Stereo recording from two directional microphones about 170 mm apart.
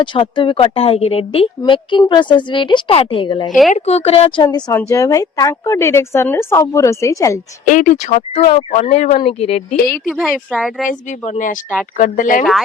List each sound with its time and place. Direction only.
0.0 s speech: 30° left (ahead or behind)
3.7 s speech: 40° left (ahead or behind)
4.9 s a woman's voice: 20° left (ahead or behind)
7.6 s speech: 50° left (ahead or behind)
10.1 s speech: centre (ahead or behind)
10.8 s speech: 50° left (ahead or behind)